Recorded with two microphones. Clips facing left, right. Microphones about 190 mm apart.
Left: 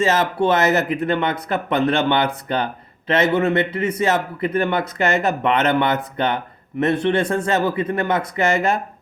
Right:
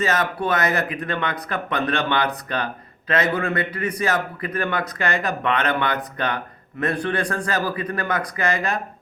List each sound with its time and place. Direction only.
0.0 s speech: 25° left (ahead or behind)